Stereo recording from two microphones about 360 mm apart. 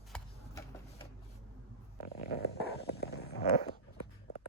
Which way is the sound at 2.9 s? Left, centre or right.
Left.